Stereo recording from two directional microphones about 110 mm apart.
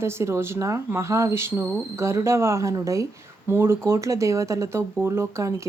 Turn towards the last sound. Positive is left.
turn(degrees=-30)  # may be behind; listen again after turning